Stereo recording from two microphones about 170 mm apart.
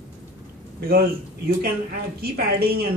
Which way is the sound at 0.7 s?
65° right (ahead or behind).